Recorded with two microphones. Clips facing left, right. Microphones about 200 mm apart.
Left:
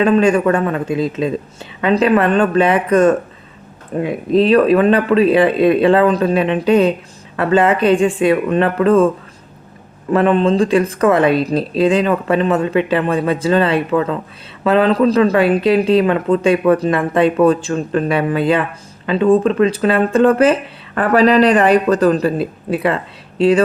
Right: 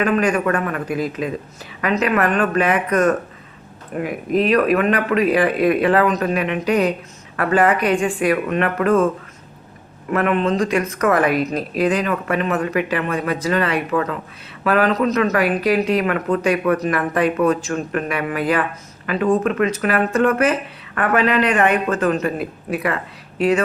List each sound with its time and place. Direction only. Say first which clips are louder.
0.0 s speech: left 5 dB; 25° left (ahead or behind)
10.1 s speech: left 5 dB; 30° left (ahead or behind)